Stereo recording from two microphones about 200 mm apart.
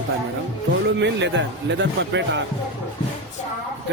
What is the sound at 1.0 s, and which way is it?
Speech, 60° right (ahead or behind).